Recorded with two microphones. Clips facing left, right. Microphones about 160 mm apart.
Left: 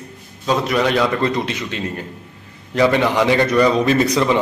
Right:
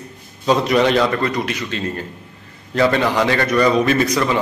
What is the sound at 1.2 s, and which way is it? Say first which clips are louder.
A man's voice: left 1 dB; 25° left (ahead or behind).